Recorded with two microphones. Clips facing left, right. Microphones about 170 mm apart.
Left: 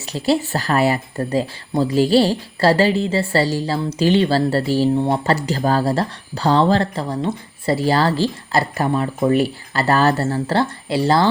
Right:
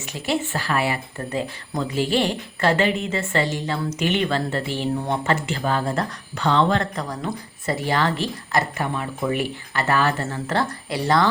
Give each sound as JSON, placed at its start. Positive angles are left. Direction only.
{"t": 0.0, "sound": "speech", "side_deg": 35}